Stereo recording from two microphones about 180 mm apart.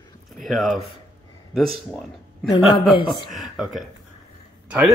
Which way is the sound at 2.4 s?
20° left (ahead or behind).